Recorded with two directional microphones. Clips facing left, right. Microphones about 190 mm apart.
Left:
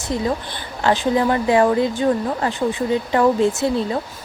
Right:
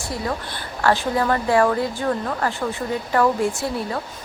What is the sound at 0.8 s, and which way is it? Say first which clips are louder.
Speech: left 3 dB; 20° left (ahead or behind).